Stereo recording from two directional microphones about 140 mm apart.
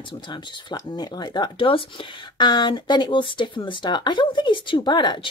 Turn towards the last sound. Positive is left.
turn(degrees=30)  # may be behind; listen again after turning